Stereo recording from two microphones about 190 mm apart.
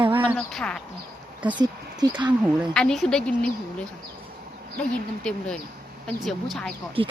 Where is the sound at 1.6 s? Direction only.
20° right (ahead or behind).